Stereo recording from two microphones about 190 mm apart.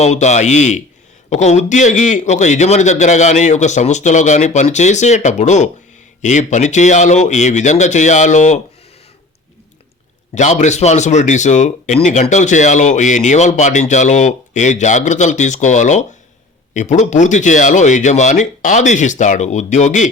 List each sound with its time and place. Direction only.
0.0 s a man's voice: 35° left (ahead or behind)
10.3 s a man's voice: 40° left (ahead or behind)